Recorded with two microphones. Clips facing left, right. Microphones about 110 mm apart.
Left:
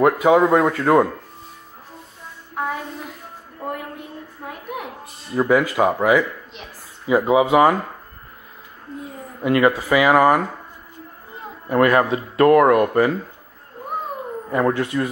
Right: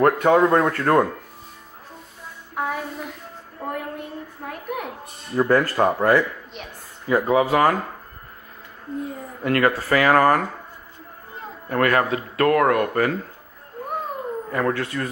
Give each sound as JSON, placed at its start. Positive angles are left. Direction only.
{"t": 0.0, "sound": "speech", "side_deg": 5}
{"t": 2.5, "sound": "music", "side_deg": 0}
{"t": 4.5, "sound": "a sound", "side_deg": 0}
{"t": 7.1, "sound": "speech", "side_deg": 15}
{"t": 9.4, "sound": "speech", "side_deg": 15}
{"t": 11.7, "sound": "speech", "side_deg": 20}
{"t": 14.5, "sound": "speech", "side_deg": 20}